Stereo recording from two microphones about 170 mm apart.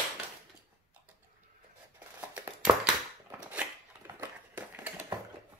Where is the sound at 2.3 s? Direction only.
10° right (ahead or behind).